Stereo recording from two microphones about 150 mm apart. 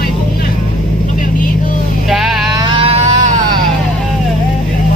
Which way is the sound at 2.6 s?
35° right (ahead or behind).